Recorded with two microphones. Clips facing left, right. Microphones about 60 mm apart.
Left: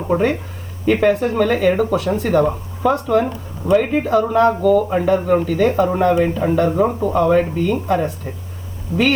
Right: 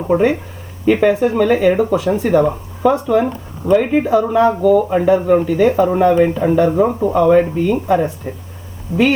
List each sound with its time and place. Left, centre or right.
0.0 s speech: centre; by 9.0 s right